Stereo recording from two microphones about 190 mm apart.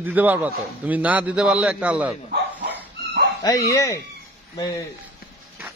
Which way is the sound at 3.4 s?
15° left (ahead or behind).